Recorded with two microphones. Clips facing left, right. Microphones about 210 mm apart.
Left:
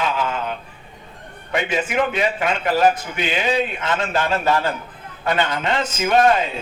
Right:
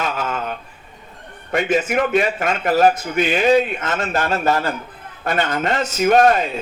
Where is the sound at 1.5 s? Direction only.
45° right (ahead or behind).